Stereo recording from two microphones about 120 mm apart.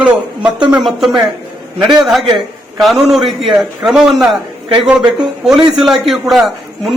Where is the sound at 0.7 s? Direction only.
Centre (ahead or behind).